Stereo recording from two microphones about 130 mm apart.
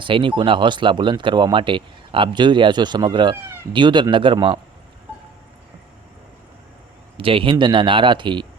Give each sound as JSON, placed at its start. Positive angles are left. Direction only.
{"t": 0.0, "sound": "speech", "side_deg": -40}
{"t": 7.2, "sound": "a man's voice", "side_deg": -45}